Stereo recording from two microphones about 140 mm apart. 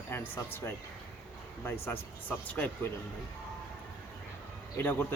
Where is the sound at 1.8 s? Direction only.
15° left (ahead or behind).